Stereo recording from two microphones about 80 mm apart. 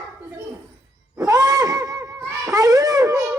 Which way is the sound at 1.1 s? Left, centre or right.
Right.